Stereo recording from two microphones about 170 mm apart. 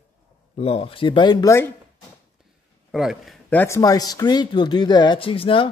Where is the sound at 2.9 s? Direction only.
Centre (ahead or behind); by 5.7 s 30° left (ahead or behind).